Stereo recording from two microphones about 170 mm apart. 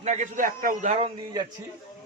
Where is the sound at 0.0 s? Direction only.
45° right (ahead or behind).